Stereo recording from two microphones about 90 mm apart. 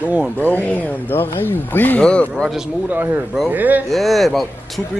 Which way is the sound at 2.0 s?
10° left (ahead or behind).